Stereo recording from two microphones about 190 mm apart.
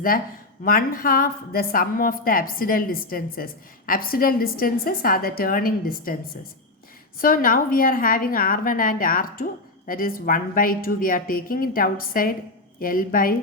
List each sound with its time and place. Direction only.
0.6 s a woman's voice: 50° left (ahead or behind)
7.2 s a woman's voice: 50° left (ahead or behind)